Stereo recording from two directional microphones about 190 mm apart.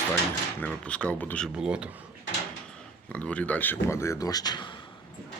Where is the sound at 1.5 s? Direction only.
5° right (ahead or behind).